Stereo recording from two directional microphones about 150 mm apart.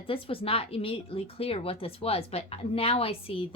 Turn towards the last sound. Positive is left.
turn(degrees=40)  # may be behind; listen again after turning